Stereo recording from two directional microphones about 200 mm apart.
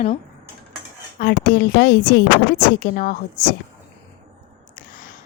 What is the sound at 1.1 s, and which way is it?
A woman's voice, 50° left (ahead or behind).